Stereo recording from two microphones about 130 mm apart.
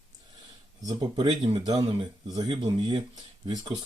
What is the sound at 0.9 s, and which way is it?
Speech, 30° right (ahead or behind).